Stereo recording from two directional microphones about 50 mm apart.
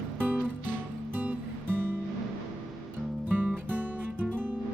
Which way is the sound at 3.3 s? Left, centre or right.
Right.